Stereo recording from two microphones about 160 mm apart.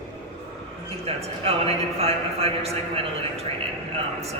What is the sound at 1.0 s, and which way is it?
A man's voice, 40° right (ahead or behind).